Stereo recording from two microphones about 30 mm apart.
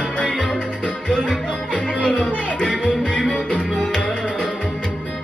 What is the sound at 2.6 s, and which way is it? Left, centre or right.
Music, left.